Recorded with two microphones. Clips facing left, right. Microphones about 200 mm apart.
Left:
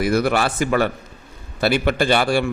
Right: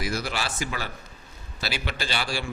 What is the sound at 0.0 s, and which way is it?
A man's voice, 60° left (ahead or behind).